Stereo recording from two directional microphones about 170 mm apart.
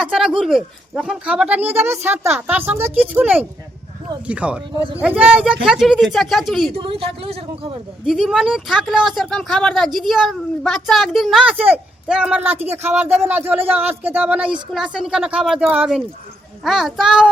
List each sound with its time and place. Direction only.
0.0 s speech: 5° right (ahead or behind)
6.7 s speech: 35° right (ahead or behind)
8.0 s speech: centre (ahead or behind)